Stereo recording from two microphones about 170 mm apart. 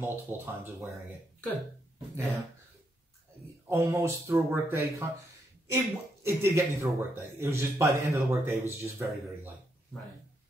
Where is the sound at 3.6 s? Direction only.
15° right (ahead or behind).